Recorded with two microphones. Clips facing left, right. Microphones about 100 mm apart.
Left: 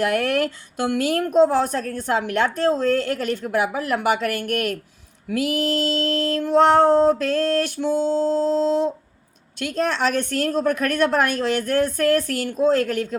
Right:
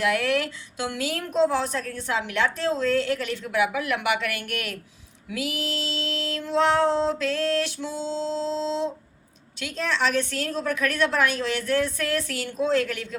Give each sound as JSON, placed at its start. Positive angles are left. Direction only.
{"t": 0.0, "sound": "a woman's voice", "side_deg": 50}